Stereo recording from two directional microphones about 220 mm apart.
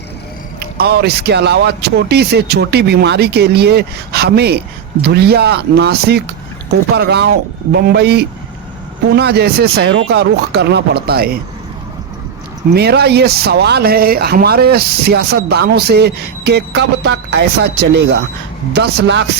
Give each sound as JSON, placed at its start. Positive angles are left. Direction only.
{"t": 0.6, "sound": "speech", "side_deg": -45}
{"t": 12.7, "sound": "speech", "side_deg": -45}